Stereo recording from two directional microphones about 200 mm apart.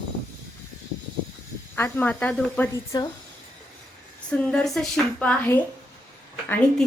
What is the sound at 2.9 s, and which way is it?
Speech, 20° left (ahead or behind).